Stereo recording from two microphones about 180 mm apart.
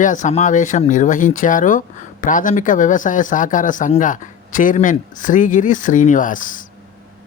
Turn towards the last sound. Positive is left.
turn(degrees=45)  # may be behind; listen again after turning